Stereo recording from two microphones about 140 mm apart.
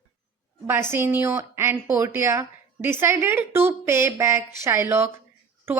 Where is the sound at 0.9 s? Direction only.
15° right (ahead or behind).